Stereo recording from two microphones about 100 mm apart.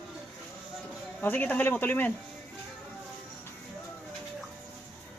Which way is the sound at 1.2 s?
15° left (ahead or behind).